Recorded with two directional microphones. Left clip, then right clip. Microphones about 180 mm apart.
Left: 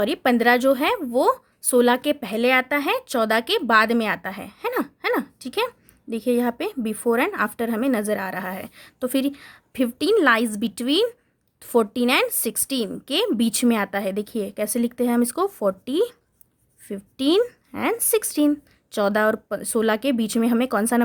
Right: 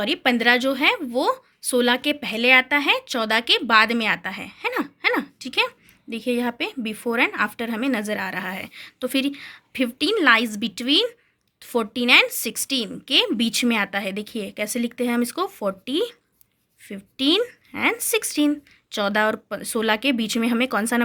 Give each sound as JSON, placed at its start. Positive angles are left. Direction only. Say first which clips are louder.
{"t": 0.0, "sound": "speech", "louder": "left 1 dB", "side_deg": 55}